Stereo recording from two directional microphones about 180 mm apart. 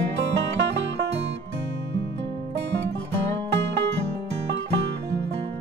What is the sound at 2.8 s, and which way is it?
Music, 75° right (ahead or behind).